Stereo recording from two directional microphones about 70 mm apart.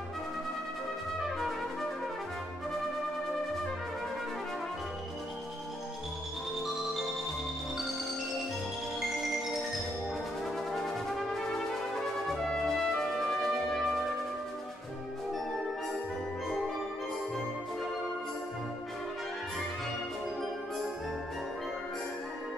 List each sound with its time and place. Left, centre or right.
6.6 s marimba: centre
10.4 s brass instrument: centre
12.4 s music: centre